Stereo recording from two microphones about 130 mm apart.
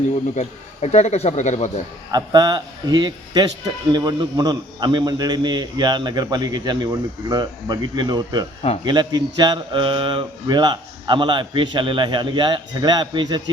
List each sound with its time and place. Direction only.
0.3 s speech: 60° left (ahead or behind)
2.1 s speech: 30° right (ahead or behind)